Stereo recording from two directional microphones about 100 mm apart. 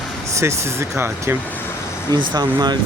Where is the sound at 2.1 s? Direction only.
45° right (ahead or behind).